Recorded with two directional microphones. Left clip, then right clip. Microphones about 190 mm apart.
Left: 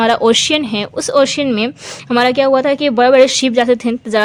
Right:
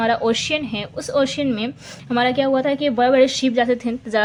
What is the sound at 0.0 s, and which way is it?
A woman's voice, 50° left (ahead or behind).